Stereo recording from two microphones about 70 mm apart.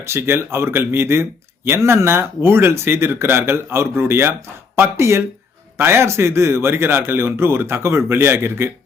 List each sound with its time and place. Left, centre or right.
0.0 s speech: right